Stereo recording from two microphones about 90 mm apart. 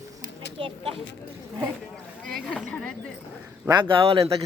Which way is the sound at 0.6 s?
70° right (ahead or behind).